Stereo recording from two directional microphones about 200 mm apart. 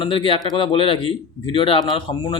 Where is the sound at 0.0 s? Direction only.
25° left (ahead or behind).